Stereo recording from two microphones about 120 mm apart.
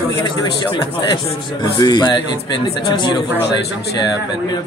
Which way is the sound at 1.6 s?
35° left (ahead or behind).